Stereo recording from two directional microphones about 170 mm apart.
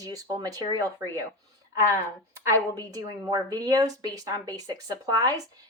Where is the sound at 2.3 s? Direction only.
20° right (ahead or behind).